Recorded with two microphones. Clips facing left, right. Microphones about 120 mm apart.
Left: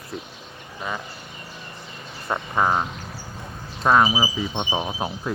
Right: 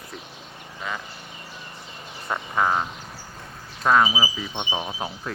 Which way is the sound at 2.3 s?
15° left (ahead or behind).